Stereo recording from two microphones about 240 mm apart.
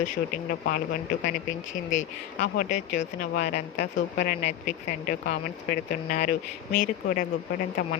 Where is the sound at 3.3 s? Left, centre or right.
Left.